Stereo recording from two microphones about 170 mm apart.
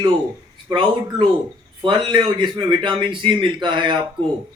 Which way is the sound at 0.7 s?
30° right (ahead or behind).